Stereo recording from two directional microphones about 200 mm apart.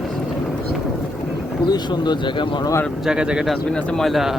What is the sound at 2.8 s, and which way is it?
Speech, 5° right (ahead or behind).